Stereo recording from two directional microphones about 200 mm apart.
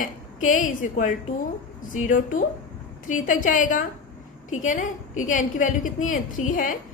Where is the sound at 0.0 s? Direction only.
40° left (ahead or behind).